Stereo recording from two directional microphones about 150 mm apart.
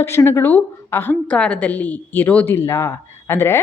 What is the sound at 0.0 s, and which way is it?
A woman's voice, 15° left (ahead or behind).